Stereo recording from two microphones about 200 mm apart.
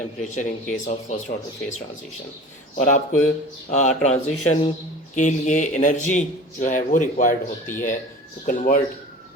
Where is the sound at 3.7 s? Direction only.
35° left (ahead or behind).